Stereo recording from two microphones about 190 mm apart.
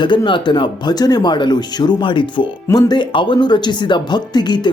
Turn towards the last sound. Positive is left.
turn(degrees=25)  # may be behind; listen again after turning